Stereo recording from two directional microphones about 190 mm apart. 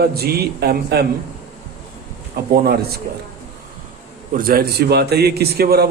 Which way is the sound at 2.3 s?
55° right (ahead or behind).